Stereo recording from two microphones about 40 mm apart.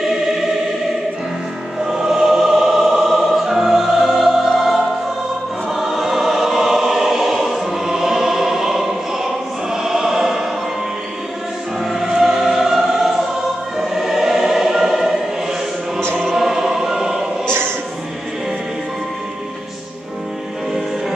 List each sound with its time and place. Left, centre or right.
1.9 s music: centre
5.7 s choir: centre
11.8 s choir: centre
16.3 s choir: centre
17.5 s a sound: right